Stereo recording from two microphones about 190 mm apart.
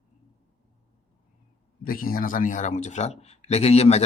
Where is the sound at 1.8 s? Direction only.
50° left (ahead or behind).